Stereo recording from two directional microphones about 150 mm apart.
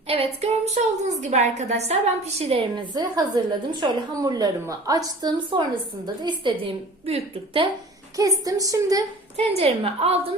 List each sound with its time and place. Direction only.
0.1 s a woman's voice: 40° right (ahead or behind)
2.9 s a woman's voice: 25° right (ahead or behind)
8.4 s a woman's voice: 25° right (ahead or behind)
9.3 s a woman's voice: 40° right (ahead or behind)